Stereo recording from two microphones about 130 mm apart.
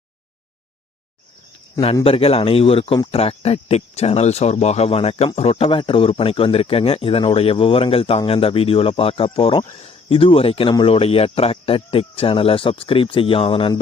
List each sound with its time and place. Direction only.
2.0 s speech: 45° left (ahead or behind)